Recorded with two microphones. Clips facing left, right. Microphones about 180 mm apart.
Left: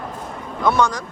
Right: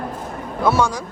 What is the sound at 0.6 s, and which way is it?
Speech, 5° right (ahead or behind).